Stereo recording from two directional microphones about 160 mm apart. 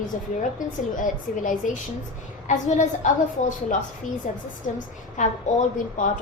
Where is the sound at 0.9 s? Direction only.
55° left (ahead or behind).